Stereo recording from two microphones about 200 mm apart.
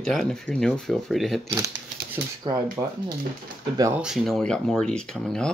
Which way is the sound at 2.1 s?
15° right (ahead or behind).